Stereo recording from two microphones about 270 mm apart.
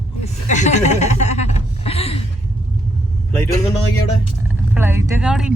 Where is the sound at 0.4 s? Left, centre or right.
Left.